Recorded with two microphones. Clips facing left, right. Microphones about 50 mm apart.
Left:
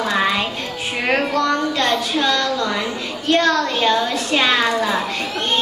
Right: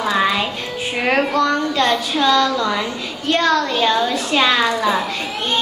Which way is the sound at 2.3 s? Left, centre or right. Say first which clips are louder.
Right 3 dB; right.